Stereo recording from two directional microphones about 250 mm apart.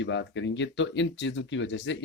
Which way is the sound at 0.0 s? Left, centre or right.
Left.